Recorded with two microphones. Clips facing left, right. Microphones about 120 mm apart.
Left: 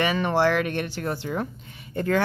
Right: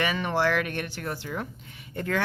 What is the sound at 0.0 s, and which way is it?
Speech, 35° left (ahead or behind).